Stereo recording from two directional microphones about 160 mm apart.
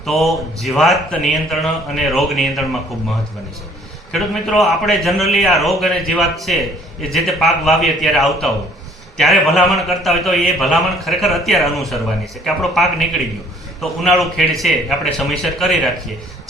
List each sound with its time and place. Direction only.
0.0 s a man's voice: centre (ahead or behind)
4.1 s a man's voice: centre (ahead or behind)
13.8 s a man's voice: centre (ahead or behind)